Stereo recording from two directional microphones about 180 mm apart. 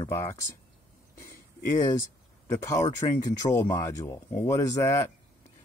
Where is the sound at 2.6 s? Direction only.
20° left (ahead or behind).